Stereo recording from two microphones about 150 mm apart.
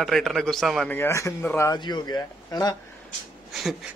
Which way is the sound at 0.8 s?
15° left (ahead or behind).